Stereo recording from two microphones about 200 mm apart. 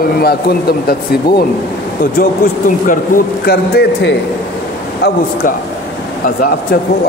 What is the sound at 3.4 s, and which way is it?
Speech, 50° left (ahead or behind).